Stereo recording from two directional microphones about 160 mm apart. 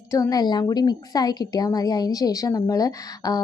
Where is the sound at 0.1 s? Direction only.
20° left (ahead or behind).